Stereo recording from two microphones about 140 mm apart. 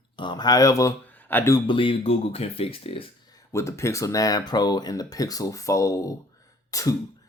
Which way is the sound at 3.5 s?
20° left (ahead or behind).